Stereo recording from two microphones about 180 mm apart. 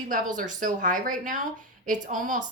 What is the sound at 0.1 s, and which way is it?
A woman's voice, 45° right (ahead or behind).